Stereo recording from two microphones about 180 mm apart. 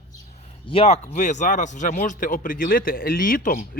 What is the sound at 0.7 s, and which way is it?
Speech, 35° left (ahead or behind).